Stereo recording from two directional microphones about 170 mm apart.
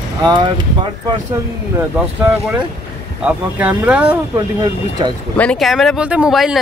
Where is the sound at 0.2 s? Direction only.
25° right (ahead or behind).